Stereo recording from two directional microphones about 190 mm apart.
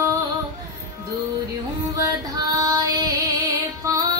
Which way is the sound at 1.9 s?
20° right (ahead or behind).